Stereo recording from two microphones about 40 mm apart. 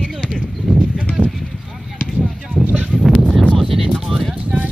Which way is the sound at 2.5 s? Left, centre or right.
Right.